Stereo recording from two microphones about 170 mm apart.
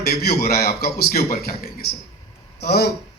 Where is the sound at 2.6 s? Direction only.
70° left (ahead or behind).